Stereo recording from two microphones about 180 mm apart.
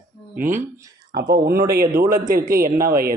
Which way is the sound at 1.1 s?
60° right (ahead or behind).